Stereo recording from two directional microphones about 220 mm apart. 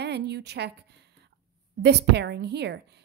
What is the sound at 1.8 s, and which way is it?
A woman's voice, 50° right (ahead or behind).